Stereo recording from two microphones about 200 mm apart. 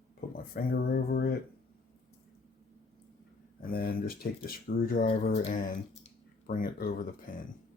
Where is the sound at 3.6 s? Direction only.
45° left (ahead or behind).